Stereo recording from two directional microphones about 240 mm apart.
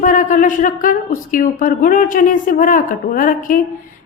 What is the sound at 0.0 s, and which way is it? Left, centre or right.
A woman's voice, left.